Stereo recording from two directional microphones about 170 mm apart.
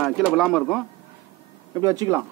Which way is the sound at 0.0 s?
Centre (ahead or behind).